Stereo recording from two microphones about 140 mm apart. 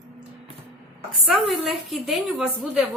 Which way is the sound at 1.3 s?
Centre (ahead or behind).